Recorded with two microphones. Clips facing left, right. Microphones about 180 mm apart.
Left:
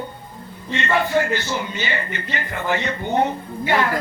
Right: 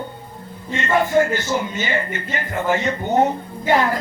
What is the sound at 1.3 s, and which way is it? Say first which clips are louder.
Speech: right 2 dB; 45° right (ahead or behind).